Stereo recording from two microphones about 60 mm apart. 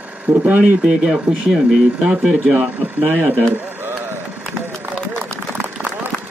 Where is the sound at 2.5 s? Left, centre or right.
Right.